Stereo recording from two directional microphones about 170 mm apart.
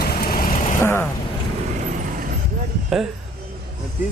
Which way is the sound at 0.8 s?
15° left (ahead or behind).